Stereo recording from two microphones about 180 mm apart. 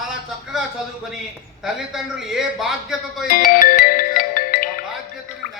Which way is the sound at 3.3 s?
50° left (ahead or behind).